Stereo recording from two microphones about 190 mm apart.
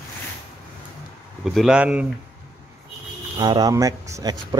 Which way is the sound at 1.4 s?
Centre (ahead or behind).